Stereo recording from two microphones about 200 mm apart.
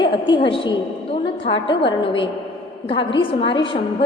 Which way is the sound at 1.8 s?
25° left (ahead or behind).